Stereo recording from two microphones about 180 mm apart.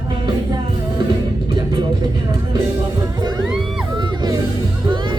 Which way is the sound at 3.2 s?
25° right (ahead or behind).